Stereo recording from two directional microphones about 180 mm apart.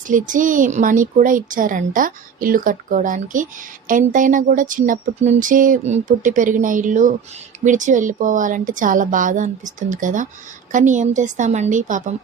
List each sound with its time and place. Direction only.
0.1 s a woman's voice: 45° right (ahead or behind)